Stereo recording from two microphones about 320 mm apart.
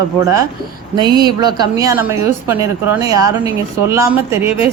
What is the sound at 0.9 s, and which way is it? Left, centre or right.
A woman's voice, centre.